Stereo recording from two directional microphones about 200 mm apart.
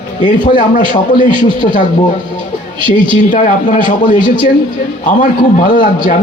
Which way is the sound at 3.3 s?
40° left (ahead or behind).